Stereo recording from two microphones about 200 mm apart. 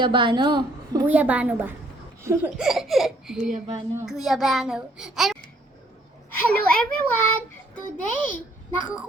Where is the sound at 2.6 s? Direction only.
Centre (ahead or behind).